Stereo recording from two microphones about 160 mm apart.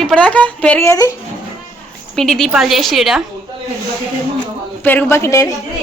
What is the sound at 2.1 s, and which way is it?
A woman's voice, 5° left (ahead or behind).